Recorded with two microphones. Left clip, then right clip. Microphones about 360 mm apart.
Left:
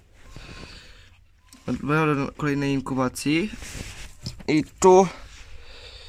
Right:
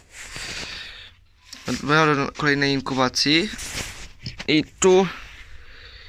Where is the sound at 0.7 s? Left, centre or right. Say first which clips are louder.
Right 11 dB; centre.